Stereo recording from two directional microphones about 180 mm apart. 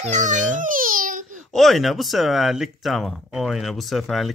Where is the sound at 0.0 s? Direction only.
40° right (ahead or behind).